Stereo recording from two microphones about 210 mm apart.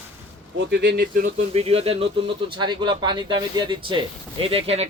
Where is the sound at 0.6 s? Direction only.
55° right (ahead or behind).